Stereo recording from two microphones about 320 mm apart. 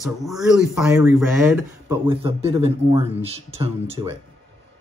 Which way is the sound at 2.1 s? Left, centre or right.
Centre.